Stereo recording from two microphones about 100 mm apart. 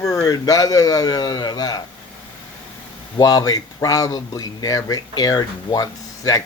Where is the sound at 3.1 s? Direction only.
40° left (ahead or behind).